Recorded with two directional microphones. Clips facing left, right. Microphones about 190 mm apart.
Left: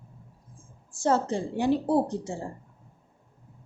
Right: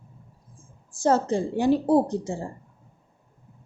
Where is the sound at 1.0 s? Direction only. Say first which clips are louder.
Right 3 dB; 40° right (ahead or behind).